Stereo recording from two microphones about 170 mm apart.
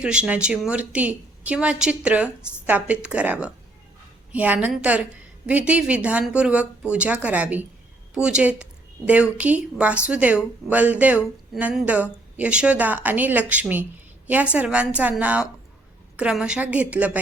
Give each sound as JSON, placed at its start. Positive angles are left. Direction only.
{"t": 0.0, "sound": "a woman's voice", "side_deg": -5}